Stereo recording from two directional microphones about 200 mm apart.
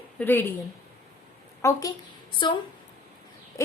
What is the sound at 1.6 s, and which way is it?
Speech, 15° left (ahead or behind).